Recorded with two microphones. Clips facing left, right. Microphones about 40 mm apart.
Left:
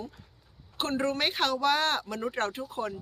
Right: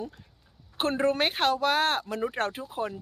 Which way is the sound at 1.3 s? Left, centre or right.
Centre.